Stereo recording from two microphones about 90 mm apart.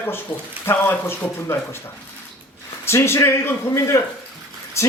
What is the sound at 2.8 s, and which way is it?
A man's voice, 30° left (ahead or behind).